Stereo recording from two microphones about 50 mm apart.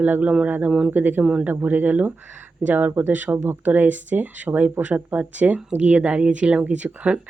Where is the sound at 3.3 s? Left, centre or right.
Right.